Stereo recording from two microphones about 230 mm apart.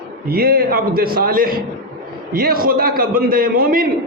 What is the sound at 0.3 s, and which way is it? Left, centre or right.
A man's voice, right.